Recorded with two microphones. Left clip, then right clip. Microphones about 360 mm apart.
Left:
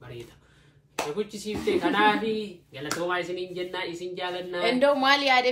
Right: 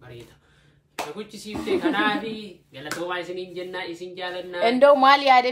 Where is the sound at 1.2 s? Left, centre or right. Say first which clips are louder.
Left 3 dB; centre.